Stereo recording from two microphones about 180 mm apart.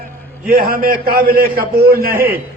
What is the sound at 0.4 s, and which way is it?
A man's voice, 55° right (ahead or behind).